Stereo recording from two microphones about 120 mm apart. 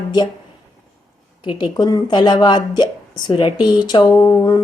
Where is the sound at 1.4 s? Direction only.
40° left (ahead or behind).